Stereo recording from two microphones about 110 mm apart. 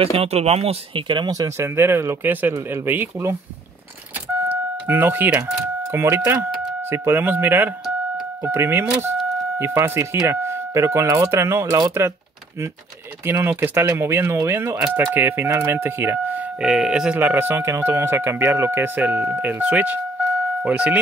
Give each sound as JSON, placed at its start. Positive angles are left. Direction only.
{"t": 0.0, "sound": "speech", "side_deg": -60}
{"t": 1.0, "sound": "speech", "side_deg": -40}
{"t": 1.6, "sound": "speech", "side_deg": -25}
{"t": 4.5, "sound": "a sound", "side_deg": -15}
{"t": 5.9, "sound": "speech", "side_deg": -20}
{"t": 13.2, "sound": "speech", "side_deg": -20}